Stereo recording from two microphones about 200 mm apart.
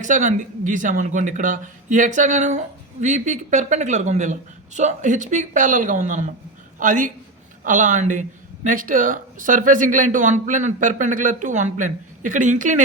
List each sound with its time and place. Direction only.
0.0 s a man's voice: 40° right (ahead or behind)